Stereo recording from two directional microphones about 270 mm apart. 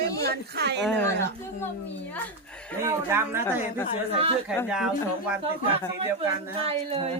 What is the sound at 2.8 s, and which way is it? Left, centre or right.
Speech, centre.